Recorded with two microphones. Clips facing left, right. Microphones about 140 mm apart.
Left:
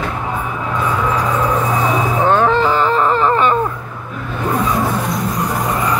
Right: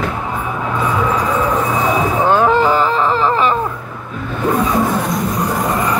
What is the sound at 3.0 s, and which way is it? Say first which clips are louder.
Baby cry: left 1 dB; centre (ahead or behind).